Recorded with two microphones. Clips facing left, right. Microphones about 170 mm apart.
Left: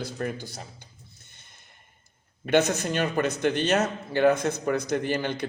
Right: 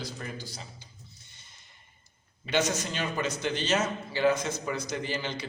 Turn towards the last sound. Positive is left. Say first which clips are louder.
# left 6 dB
turn(degrees=55)  # may be behind; listen again after turning